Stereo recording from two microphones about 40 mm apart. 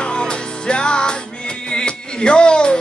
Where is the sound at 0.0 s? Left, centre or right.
Left.